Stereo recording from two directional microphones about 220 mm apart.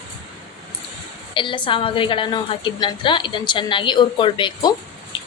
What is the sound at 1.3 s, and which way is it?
A woman's voice, 20° left (ahead or behind).